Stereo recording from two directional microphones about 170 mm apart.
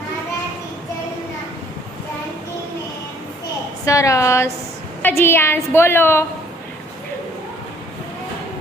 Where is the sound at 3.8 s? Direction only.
20° left (ahead or behind).